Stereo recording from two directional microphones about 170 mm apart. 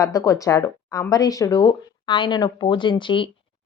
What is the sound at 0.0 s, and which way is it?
Speech, 20° left (ahead or behind).